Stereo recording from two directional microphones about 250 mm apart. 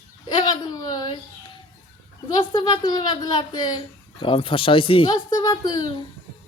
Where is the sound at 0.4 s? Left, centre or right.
Centre.